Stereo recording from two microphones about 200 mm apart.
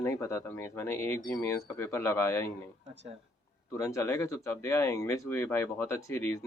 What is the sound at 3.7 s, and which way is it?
Speech, 15° left (ahead or behind).